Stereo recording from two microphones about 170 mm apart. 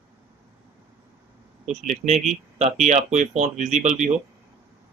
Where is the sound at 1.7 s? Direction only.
40° right (ahead or behind).